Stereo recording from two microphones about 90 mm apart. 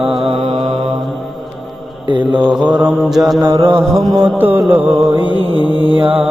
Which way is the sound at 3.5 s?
75° right (ahead or behind).